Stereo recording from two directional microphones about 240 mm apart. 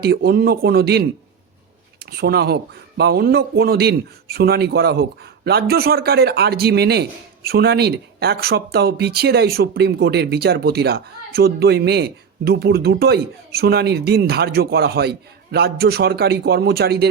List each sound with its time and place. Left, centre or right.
0.0 s a man's voice: right